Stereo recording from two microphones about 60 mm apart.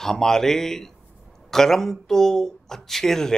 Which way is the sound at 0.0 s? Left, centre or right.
Centre.